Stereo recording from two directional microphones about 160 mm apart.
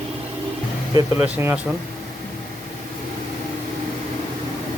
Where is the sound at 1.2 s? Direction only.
15° right (ahead or behind).